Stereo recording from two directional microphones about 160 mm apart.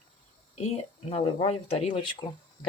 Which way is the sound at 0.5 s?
40° left (ahead or behind).